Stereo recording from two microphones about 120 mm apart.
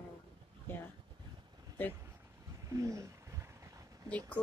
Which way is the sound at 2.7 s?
25° right (ahead or behind).